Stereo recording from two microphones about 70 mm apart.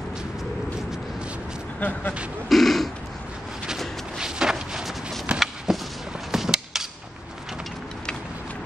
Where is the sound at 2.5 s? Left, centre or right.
Centre.